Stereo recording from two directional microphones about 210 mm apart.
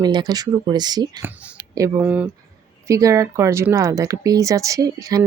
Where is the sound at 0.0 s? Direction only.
20° right (ahead or behind).